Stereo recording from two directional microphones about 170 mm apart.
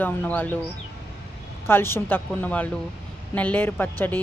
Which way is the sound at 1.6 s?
15° left (ahead or behind).